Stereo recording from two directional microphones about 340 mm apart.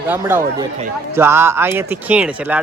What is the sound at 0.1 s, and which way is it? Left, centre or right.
Speech, centre.